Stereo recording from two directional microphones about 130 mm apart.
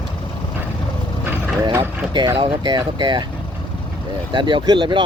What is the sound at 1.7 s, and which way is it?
Speech, 20° right (ahead or behind).